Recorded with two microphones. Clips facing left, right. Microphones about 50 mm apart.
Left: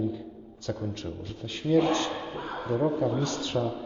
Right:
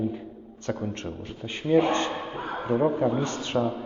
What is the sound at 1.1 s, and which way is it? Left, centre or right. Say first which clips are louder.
A man's voice: right 2 dB; right.